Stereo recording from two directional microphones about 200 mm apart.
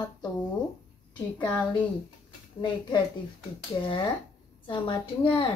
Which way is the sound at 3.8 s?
25° left (ahead or behind).